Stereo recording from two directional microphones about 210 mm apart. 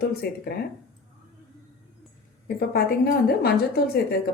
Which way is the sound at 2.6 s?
45° left (ahead or behind).